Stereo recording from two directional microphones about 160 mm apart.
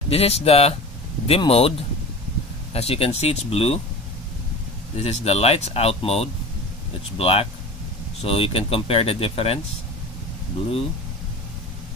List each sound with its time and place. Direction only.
0.1 s speech: 40° left (ahead or behind)
4.9 s speech: 40° left (ahead or behind)